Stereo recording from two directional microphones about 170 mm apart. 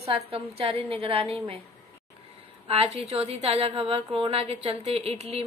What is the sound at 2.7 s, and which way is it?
A woman's voice, 35° right (ahead or behind).